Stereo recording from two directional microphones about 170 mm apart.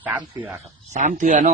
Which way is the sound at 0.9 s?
45° right (ahead or behind).